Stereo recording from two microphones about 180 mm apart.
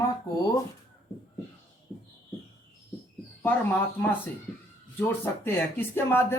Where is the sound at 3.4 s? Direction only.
10° left (ahead or behind).